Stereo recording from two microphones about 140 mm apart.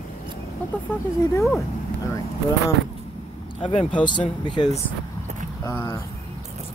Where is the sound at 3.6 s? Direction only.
40° left (ahead or behind).